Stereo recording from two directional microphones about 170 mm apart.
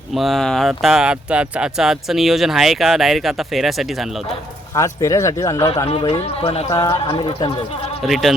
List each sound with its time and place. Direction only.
0.1 s speech: centre (ahead or behind)
4.7 s speech: 20° left (ahead or behind)
5.9 s speech: 35° left (ahead or behind)
6.7 s speech: 15° left (ahead or behind)
7.1 s speech: 35° left (ahead or behind)
8.0 s speech: centre (ahead or behind)